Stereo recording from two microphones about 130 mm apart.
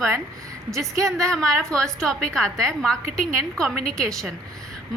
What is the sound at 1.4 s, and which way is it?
A woman's voice, 5° left (ahead or behind).